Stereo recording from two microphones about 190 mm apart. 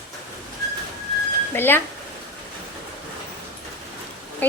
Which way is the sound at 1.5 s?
10° left (ahead or behind).